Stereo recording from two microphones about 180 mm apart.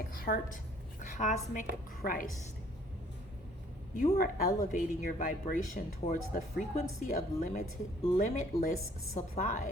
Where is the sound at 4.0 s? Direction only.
50° left (ahead or behind).